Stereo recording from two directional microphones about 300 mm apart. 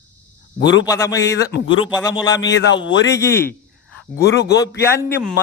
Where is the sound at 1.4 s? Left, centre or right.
Left.